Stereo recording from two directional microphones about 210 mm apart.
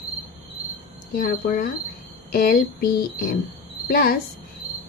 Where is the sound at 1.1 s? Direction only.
45° left (ahead or behind).